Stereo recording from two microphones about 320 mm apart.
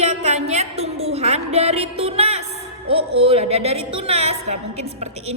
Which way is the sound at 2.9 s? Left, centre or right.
Centre.